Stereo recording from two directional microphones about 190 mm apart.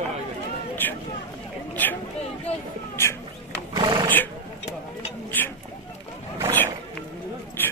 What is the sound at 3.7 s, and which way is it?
Horse, 20° right (ahead or behind).